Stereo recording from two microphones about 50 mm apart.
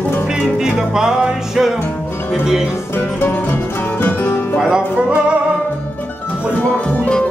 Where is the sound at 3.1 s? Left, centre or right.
Left.